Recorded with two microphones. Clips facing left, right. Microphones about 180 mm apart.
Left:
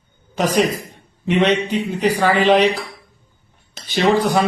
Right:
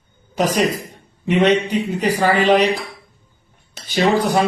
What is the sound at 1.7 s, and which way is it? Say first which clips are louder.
Speech: even; 5° right (ahead or behind).